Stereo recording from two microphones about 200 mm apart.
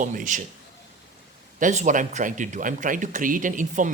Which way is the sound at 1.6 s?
35° right (ahead or behind).